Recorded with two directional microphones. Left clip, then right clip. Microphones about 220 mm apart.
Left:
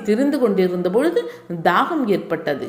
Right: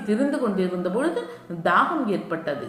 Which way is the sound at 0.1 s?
35° left (ahead or behind).